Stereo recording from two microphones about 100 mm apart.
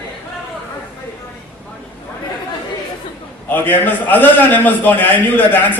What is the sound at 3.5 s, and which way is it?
A man's voice, 20° left (ahead or behind).